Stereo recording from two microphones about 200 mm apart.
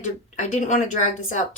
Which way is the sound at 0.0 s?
35° left (ahead or behind).